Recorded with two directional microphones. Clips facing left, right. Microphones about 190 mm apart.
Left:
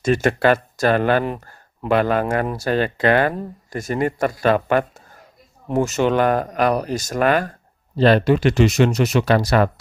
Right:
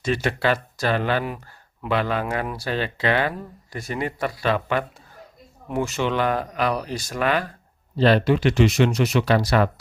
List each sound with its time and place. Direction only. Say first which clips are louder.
0.0 s speech: left 6 dB; 45° left (ahead or behind)
1.3 s speech: left 5 dB; 35° left (ahead or behind)
2.0 s speech: left 6 dB; 50° left (ahead or behind)